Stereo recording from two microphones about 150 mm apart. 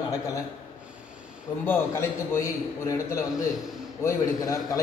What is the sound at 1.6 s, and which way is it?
A man's voice, 15° left (ahead or behind).